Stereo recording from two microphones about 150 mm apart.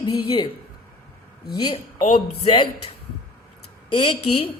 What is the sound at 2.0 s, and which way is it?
Speech, 45° left (ahead or behind).